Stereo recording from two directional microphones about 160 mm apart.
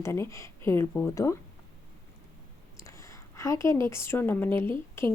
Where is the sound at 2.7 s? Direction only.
20° left (ahead or behind).